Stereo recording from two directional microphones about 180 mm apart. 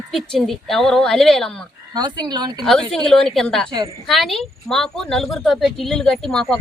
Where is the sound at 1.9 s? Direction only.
25° right (ahead or behind).